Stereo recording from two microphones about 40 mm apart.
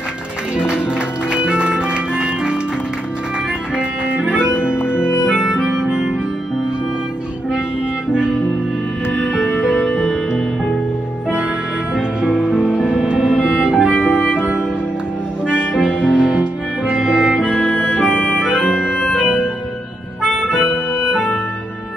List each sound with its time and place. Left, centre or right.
0.6 s music: right
3.7 s music: right
8.1 s music: right
9.8 s music: centre
11.9 s music: centre
13.9 s music: left
15.4 s music: centre
17.7 s organ: left
18.6 s organ: centre
19.1 s music: centre
20.2 s music: centre
21.0 s music: right